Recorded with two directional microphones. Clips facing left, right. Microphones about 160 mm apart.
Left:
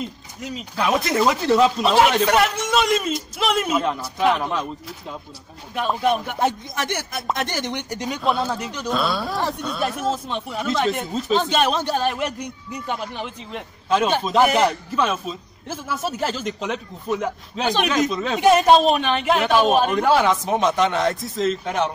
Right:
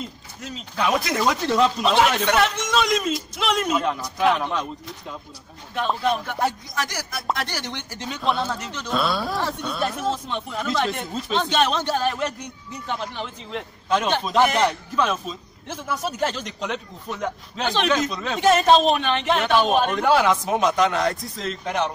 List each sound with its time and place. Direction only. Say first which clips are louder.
0.4 s a man's voice: left 1 dB; 5° left (ahead or behind)
8.2 s a man's voice: left 1 dB; 5° left (ahead or behind)